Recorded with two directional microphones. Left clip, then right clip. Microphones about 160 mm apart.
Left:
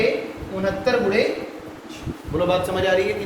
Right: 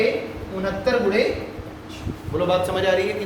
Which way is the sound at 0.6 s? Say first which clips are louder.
Left 1 dB; centre (ahead or behind).